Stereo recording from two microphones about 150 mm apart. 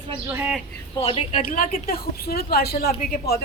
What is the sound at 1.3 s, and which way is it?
A woman's voice, 70° left (ahead or behind).